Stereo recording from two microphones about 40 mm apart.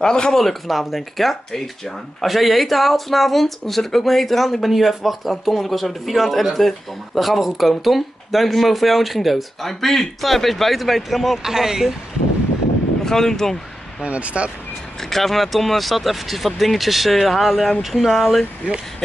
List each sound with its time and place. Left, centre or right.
0.0 s speech: centre
0.4 s speech: centre
13.0 s speech: centre
14.0 s speech: right
15.0 s speech: centre